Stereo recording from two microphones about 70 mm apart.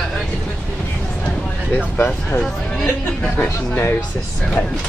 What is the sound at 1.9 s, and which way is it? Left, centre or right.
Speech, left.